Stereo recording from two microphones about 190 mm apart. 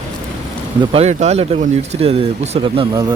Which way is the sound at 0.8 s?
30° right (ahead or behind).